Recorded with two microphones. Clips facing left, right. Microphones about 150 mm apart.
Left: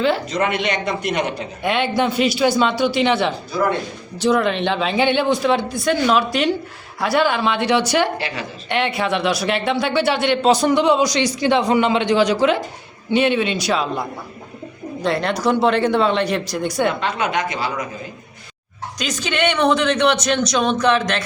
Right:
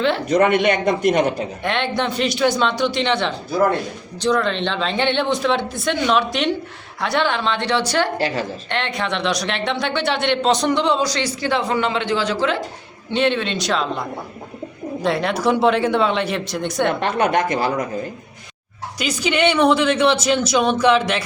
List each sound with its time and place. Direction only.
0.3 s a man's voice: 55° right (ahead or behind)
1.6 s a man's voice: 10° left (ahead or behind)
15.0 s speech: centre (ahead or behind)
17.0 s a man's voice: 50° right (ahead or behind)
18.9 s speech: 10° right (ahead or behind)